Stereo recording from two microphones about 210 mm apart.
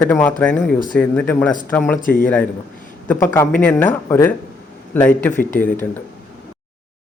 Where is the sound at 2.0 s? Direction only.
40° left (ahead or behind).